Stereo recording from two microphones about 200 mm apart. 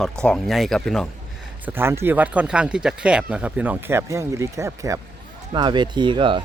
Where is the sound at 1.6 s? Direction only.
10° right (ahead or behind).